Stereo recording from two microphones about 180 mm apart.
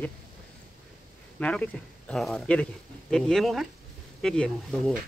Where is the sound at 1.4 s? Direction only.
5° left (ahead or behind).